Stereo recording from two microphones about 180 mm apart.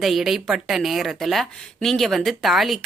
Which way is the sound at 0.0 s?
Centre (ahead or behind).